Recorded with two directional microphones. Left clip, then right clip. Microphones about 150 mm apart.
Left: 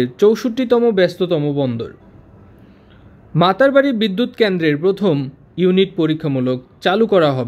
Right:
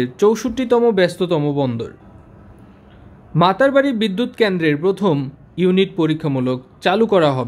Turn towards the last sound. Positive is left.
turn(degrees=20)  # may be behind; listen again after turning